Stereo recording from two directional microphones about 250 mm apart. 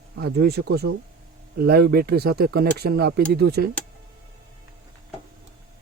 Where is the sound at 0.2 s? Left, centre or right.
Right.